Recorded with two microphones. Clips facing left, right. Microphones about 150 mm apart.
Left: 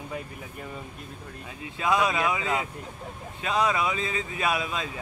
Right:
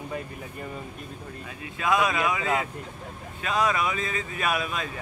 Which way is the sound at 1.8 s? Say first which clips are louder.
Even; 25° left (ahead or behind).